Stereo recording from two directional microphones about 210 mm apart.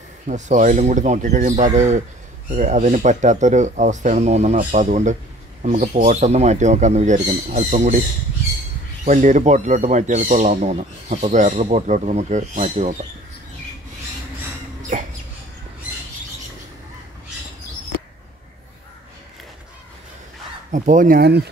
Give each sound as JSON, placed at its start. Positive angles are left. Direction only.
{"t": 0.3, "sound": "speech", "side_deg": -35}
{"t": 9.0, "sound": "speech", "side_deg": -35}
{"t": 20.7, "sound": "speech", "side_deg": -40}